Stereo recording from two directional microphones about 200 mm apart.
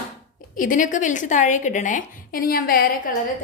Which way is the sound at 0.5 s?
40° left (ahead or behind).